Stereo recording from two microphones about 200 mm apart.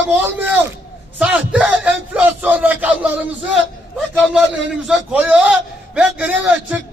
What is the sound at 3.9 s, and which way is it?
A man's voice, 5° right (ahead or behind).